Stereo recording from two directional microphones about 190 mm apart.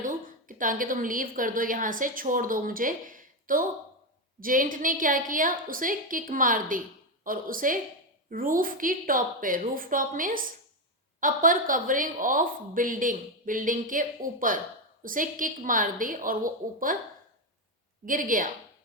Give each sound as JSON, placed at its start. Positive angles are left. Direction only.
{"t": 0.0, "sound": "a woman's voice", "side_deg": -45}
{"t": 18.0, "sound": "a woman's voice", "side_deg": -45}